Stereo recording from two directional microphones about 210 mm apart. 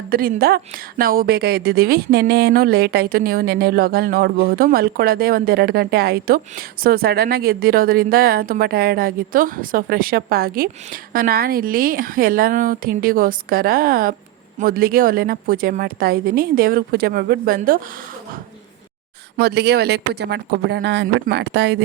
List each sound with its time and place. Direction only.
0.1 s speech: 45° right (ahead or behind)
19.4 s speech: 50° right (ahead or behind)